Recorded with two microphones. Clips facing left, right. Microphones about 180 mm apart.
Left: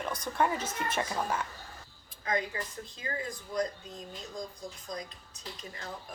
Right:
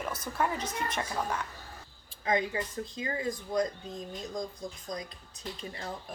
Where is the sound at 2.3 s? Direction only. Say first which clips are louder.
Right 3 dB; 20° right (ahead or behind).